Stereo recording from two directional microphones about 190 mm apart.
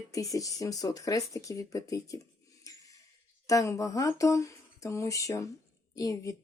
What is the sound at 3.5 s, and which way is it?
Speech, 15° left (ahead or behind).